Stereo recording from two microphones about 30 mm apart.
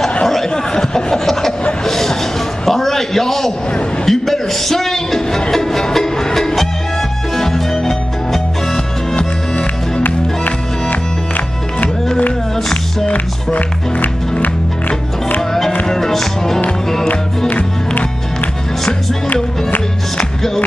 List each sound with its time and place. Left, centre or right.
0.3 s a sound: centre
1.2 s chuckle: centre
1.9 s a sound: centre
5.5 s music: centre
10.0 s music: left
13.1 s music: left
15.9 s music: centre
17.5 s music: left